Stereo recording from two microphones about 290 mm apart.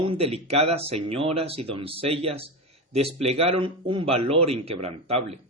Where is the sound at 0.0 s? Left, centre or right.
Centre.